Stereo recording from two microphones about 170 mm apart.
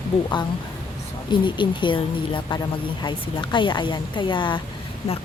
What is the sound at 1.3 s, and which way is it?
A woman's voice, 25° left (ahead or behind).